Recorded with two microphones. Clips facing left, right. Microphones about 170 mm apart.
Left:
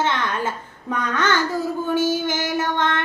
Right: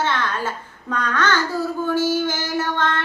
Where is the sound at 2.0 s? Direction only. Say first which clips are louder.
Even; 20° left (ahead or behind).